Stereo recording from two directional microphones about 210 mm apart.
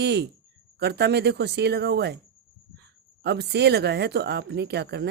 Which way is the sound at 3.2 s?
50° right (ahead or behind).